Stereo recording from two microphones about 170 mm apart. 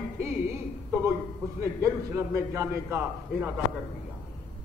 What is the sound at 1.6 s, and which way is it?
A man's voice, 15° right (ahead or behind).